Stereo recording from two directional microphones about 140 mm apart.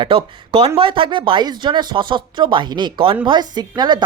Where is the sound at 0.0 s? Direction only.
40° right (ahead or behind).